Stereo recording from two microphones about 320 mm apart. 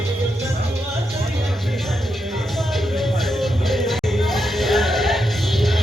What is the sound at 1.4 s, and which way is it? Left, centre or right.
Music, centre.